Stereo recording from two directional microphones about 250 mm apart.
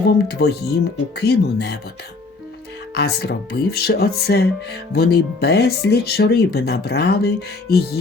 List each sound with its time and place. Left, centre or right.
0.3 s speech: left
2.9 s speech: left